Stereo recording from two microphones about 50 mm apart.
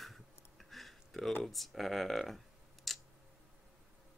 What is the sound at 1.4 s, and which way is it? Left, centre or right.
Speech, centre.